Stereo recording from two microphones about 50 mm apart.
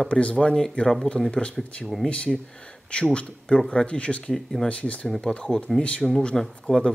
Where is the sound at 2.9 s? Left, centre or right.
Left.